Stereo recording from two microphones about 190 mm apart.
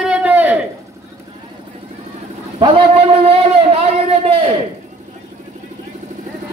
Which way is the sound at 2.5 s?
25° right (ahead or behind).